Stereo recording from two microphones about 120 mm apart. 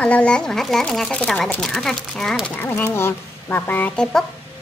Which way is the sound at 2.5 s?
20° left (ahead or behind).